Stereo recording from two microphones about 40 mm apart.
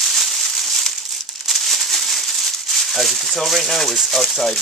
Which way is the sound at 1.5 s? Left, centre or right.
Centre.